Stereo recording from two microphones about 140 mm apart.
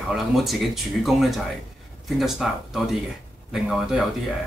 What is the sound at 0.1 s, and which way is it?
Speech, centre (ahead or behind).